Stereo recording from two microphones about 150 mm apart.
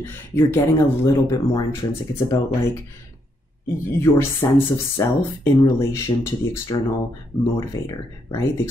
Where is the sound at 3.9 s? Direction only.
15° left (ahead or behind).